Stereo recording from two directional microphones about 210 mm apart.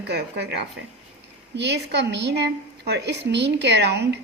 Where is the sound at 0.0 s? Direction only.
50° right (ahead or behind).